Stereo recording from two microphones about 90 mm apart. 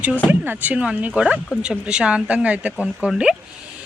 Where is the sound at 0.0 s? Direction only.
15° right (ahead or behind).